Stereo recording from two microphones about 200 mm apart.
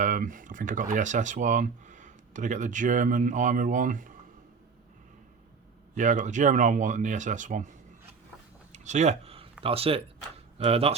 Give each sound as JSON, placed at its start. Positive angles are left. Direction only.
{"t": 0.0, "sound": "speech", "side_deg": -40}
{"t": 5.9, "sound": "speech", "side_deg": -40}
{"t": 8.7, "sound": "a sound", "side_deg": -35}
{"t": 9.6, "sound": "speech", "side_deg": -30}